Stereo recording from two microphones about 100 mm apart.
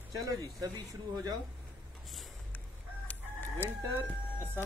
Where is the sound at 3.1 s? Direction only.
20° left (ahead or behind).